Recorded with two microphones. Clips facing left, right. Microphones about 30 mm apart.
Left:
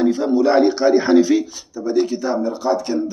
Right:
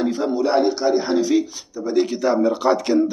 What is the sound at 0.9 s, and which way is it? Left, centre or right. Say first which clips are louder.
Speech: left 6 dB; left.